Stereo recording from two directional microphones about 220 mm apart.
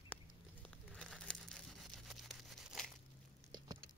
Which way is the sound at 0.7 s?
5° left (ahead or behind).